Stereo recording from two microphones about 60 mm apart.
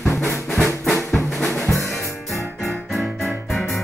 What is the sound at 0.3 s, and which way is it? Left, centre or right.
Music, centre.